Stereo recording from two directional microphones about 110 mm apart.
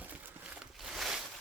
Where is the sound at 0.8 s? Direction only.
Centre (ahead or behind).